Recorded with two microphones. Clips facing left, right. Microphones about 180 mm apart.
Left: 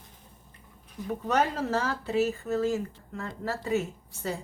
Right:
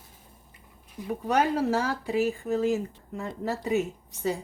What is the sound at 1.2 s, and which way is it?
Speech, 10° right (ahead or behind).